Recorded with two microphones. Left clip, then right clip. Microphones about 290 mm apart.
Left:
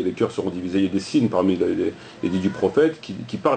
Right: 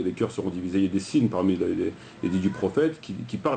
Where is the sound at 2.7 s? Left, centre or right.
Centre.